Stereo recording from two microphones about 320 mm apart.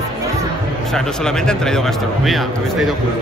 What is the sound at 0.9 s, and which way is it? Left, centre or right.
A man's voice, centre.